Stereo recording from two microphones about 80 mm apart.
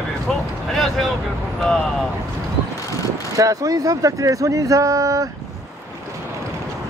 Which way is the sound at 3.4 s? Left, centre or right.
Right.